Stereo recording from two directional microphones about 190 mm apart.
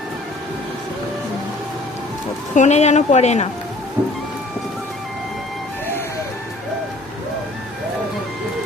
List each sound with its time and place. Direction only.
2.6 s a woman's voice: 35° left (ahead or behind)